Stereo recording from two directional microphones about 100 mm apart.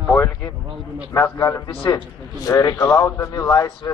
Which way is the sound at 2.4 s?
35° left (ahead or behind).